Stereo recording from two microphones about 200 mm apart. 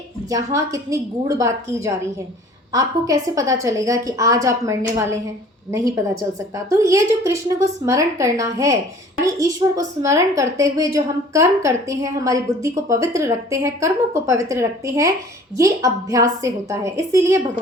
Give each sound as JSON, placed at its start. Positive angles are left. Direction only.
{"t": 0.3, "sound": "a woman's voice", "side_deg": -15}
{"t": 6.7, "sound": "a woman's voice", "side_deg": -15}